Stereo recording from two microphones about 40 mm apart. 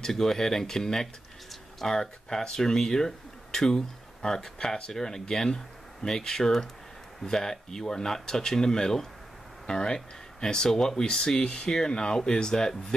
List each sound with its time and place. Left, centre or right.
0.0 s speech: centre